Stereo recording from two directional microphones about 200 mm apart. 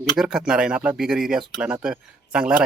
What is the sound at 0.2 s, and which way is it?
Speech, 5° right (ahead or behind).